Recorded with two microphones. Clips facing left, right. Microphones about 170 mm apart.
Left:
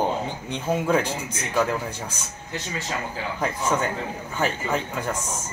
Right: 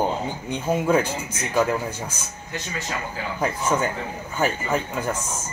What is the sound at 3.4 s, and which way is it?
A man's voice, 5° right (ahead or behind).